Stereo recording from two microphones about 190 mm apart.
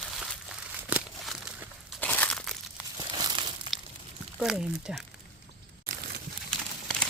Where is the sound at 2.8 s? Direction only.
5° right (ahead or behind).